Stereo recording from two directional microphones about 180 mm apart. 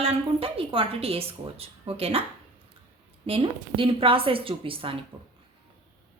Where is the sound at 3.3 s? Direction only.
30° right (ahead or behind).